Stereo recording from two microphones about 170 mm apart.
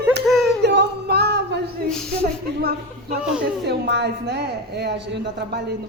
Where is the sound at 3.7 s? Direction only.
85° right.